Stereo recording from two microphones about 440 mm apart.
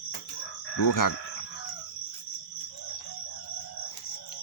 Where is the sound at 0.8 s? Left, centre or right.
Left.